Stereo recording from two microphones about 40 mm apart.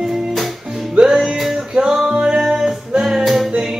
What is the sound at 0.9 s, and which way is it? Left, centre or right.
Music, centre.